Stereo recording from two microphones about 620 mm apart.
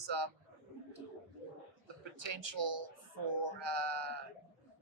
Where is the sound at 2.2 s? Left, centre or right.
Right.